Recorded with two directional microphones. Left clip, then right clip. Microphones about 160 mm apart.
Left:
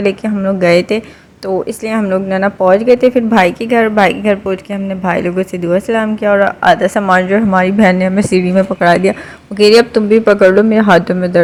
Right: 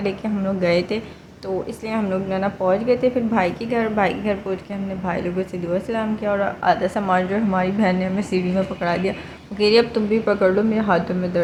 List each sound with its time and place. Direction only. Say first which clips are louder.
0.0 s speech: left 10 dB; 40° left (ahead or behind)